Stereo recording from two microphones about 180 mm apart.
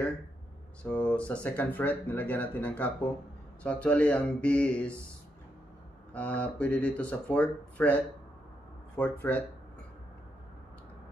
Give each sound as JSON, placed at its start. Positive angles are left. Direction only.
{"t": 0.8, "sound": "speech", "side_deg": 5}
{"t": 6.1, "sound": "speech", "side_deg": 5}